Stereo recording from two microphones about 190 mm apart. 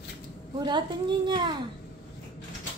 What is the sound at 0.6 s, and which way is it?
Speech, 25° right (ahead or behind).